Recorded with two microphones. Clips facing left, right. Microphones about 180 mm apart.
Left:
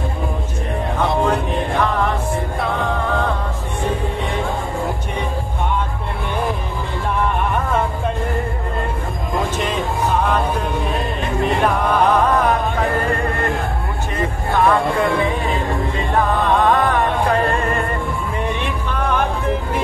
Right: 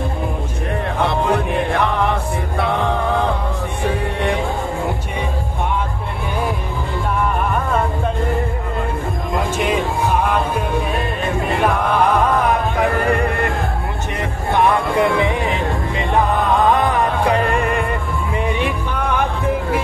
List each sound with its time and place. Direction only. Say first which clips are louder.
14.5 s music: even; 20° right (ahead or behind)
16.6 s music: even; 20° right (ahead or behind)